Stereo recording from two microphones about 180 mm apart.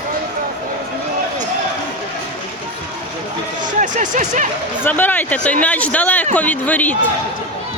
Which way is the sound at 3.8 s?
45° right (ahead or behind).